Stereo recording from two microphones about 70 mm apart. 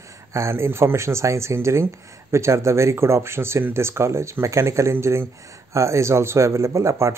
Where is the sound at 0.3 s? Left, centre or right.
Right.